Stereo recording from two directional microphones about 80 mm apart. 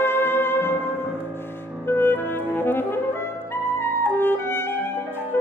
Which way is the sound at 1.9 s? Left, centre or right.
Left.